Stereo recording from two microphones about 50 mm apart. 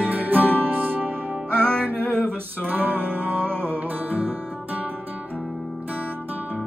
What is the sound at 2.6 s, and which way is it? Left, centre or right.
Music, right.